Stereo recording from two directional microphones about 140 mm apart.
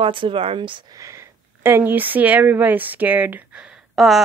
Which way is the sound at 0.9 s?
20° right (ahead or behind).